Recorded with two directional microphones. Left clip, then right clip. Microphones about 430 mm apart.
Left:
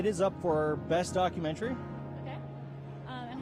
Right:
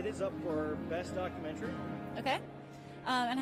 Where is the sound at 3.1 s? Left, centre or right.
Right.